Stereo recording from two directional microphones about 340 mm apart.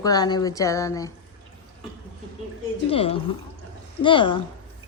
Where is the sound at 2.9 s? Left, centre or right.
Centre.